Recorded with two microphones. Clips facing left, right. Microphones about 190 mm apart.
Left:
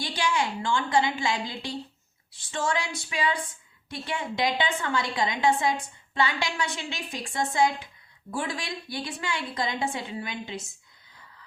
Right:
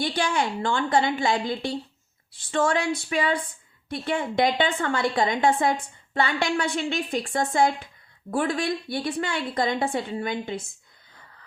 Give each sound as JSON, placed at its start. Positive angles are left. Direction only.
{"t": 0.0, "sound": "a woman's voice", "side_deg": -55}